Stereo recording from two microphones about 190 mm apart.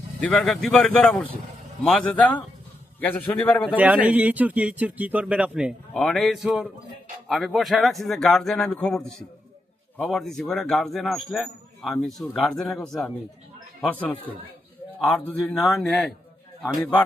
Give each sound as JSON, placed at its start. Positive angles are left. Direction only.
{"t": 0.2, "sound": "a man's voice", "side_deg": 5}
{"t": 3.8, "sound": "a man's voice", "side_deg": -10}